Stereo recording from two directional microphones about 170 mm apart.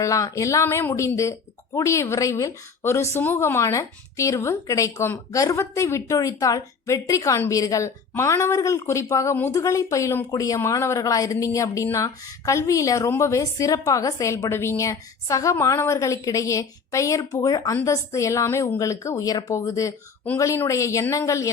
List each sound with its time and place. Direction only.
0.0 s speech: 20° left (ahead or behind)